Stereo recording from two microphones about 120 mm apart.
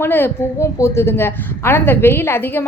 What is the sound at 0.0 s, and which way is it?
A woman's voice, 20° left (ahead or behind).